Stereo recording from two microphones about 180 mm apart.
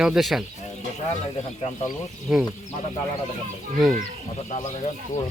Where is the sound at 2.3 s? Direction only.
Centre (ahead or behind).